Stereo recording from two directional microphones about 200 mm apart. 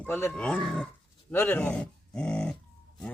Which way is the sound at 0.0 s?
10° left (ahead or behind).